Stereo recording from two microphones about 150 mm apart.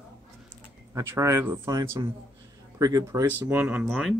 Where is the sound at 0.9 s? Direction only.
20° right (ahead or behind).